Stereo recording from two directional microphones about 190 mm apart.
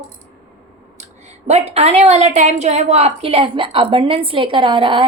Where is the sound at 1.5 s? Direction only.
35° right (ahead or behind).